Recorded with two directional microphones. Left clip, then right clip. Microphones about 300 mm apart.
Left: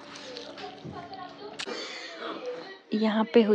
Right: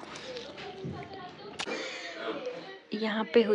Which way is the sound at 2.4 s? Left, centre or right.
Centre.